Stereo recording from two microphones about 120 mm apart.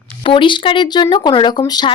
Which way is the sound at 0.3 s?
45° left (ahead or behind).